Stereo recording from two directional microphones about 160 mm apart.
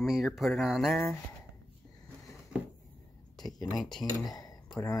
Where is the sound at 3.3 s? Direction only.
25° left (ahead or behind).